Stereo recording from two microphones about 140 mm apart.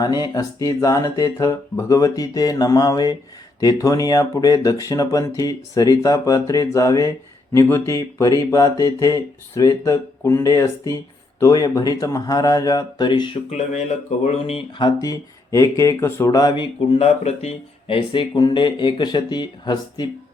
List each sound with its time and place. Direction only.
0.0 s speech: 30° left (ahead or behind)
13.5 s speech: 50° left (ahead or behind)
14.8 s speech: 25° left (ahead or behind)
17.0 s speech: 50° left (ahead or behind); by 20.1 s 30° left (ahead or behind)